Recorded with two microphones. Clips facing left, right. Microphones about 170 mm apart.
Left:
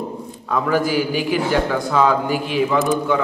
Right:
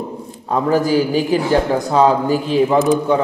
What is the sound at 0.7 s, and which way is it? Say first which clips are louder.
A man's voice: right 4 dB; 35° right (ahead or behind).